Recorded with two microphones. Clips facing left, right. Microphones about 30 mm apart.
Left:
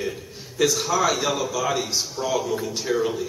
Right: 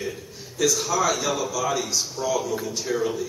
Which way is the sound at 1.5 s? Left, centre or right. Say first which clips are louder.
Left 1 dB; left.